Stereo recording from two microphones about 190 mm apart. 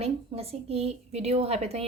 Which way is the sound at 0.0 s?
30° right (ahead or behind).